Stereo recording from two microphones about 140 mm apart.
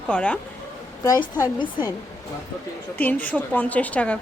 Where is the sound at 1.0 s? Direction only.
25° left (ahead or behind).